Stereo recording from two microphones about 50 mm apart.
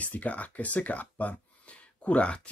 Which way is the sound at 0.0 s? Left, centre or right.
Left.